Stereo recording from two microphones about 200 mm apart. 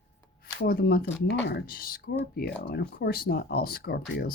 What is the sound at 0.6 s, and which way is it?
Speech, 50° left (ahead or behind).